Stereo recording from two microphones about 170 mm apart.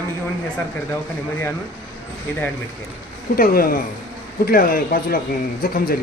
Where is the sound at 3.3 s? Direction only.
60° left (ahead or behind).